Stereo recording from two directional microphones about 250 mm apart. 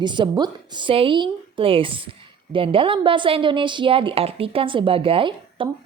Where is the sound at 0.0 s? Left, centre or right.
Centre.